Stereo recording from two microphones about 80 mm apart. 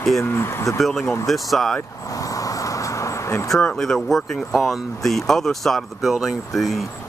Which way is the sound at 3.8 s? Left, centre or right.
Centre.